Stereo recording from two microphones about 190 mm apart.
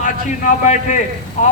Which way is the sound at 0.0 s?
40° left (ahead or behind).